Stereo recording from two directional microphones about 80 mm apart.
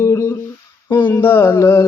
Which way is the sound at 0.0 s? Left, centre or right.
Left.